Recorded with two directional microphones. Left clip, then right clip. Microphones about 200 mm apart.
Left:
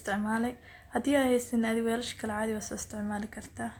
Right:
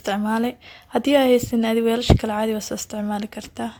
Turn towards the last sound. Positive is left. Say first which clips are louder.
# right 9 dB
turn(degrees=-40)  # may be behind; listen again after turning